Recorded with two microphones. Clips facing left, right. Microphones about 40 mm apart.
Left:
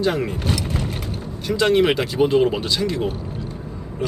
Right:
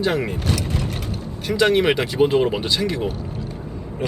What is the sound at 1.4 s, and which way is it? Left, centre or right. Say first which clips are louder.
Speech: even; right.